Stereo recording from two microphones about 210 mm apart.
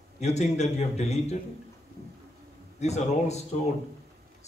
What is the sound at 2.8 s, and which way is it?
Speech, 30° left (ahead or behind).